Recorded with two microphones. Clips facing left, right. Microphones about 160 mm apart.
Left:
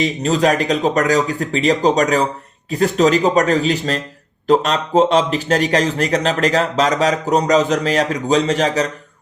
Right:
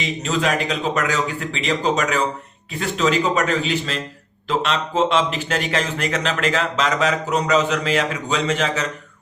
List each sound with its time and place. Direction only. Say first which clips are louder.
0.0 s a man's voice: left 6 dB; 40° left (ahead or behind)